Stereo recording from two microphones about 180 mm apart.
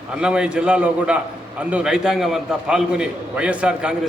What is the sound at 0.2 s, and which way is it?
A man's voice, 5° right (ahead or behind).